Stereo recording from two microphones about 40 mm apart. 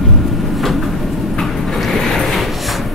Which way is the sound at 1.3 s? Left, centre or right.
Centre.